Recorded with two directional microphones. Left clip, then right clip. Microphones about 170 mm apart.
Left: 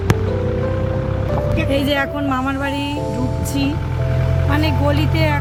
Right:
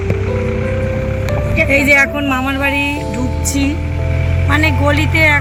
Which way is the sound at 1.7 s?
Centre (ahead or behind).